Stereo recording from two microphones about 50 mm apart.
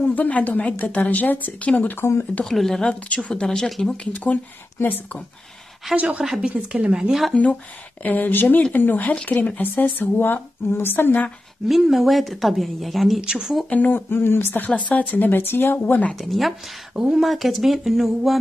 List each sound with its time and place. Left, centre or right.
0.1 s speech: left
2.0 s speech: left
2.4 s speech: centre
2.9 s speech: left; by 3.9 s centre
3.9 s speech: left
5.9 s speech: right
8.0 s speech: left
11.6 s speech: centre
13.2 s speech: centre
13.7 s speech: left
14.8 s speech: left
16.2 s speech: centre
16.9 s speech: centre
17.2 s speech: centre